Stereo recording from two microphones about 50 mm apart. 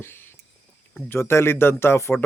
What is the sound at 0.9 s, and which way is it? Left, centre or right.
Speech, left.